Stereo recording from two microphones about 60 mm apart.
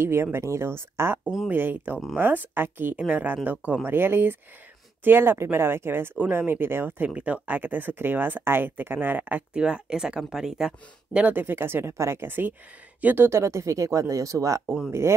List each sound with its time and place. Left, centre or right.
0.0 s speech: right
3.0 s speech: right
9.5 s speech: centre
11.1 s speech: right
13.3 s speech: right
14.9 s speech: right